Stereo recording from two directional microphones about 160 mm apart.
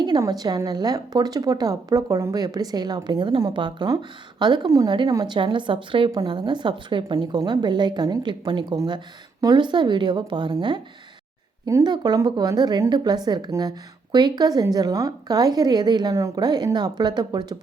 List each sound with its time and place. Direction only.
0.0 s a woman's voice: 25° right (ahead or behind)